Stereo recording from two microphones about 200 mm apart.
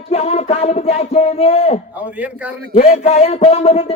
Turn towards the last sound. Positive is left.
turn(degrees=30)  # may be behind; listen again after turning